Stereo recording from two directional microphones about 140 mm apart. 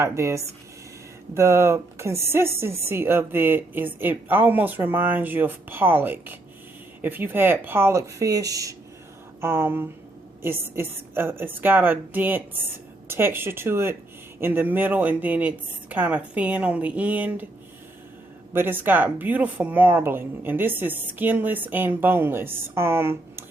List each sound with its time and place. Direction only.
0.0 s speech: 20° right (ahead or behind)
18.5 s speech: 15° right (ahead or behind)